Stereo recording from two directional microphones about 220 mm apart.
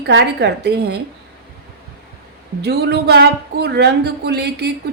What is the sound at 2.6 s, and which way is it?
Speech, 45° right (ahead or behind).